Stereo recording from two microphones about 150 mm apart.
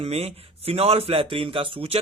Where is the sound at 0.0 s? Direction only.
40° right (ahead or behind).